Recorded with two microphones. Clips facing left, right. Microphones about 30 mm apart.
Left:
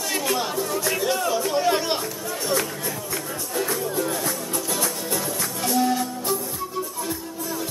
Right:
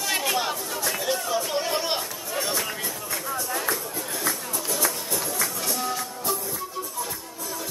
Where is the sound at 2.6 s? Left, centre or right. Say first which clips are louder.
Left 1 dB; right.